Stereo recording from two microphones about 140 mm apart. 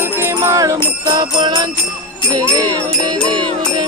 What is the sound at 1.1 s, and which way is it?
Jingle bell, 35° right (ahead or behind).